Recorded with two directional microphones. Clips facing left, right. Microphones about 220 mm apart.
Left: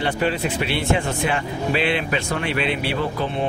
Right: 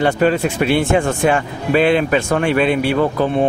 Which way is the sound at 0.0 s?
45° right (ahead or behind).